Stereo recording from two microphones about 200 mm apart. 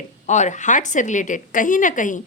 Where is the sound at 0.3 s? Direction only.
35° left (ahead or behind).